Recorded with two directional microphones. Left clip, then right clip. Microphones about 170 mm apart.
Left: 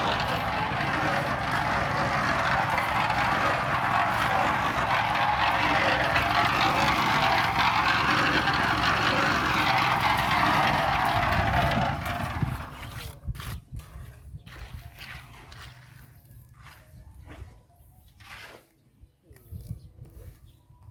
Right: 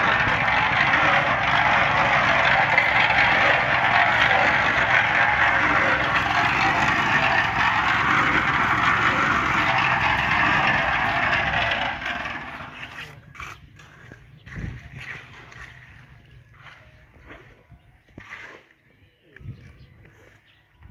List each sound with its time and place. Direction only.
0.0 s vehicle: 15° right (ahead or behind)
0.5 s vehicle: 25° right (ahead or behind)
3.7 s vehicle: 40° right (ahead or behind); by 12.4 s 10° right (ahead or behind)
13.3 s a sound: 35° right (ahead or behind)
14.4 s horse: 45° right (ahead or behind)
18.2 s a sound: 45° right (ahead or behind)